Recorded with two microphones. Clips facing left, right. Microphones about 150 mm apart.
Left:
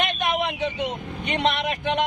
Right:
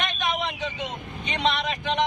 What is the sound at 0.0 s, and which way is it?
Speech, 55° left (ahead or behind).